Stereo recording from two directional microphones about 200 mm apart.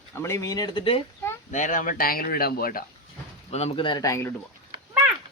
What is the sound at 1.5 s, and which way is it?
Speech, 40° left (ahead or behind).